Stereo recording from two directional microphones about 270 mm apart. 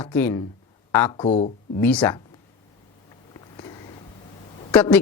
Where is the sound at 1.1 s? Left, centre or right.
Left.